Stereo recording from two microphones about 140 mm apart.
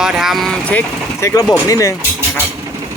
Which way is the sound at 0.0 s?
5° right (ahead or behind).